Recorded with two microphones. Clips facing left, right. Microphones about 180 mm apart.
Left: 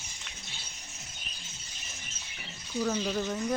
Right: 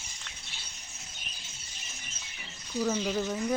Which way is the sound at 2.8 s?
5° right (ahead or behind).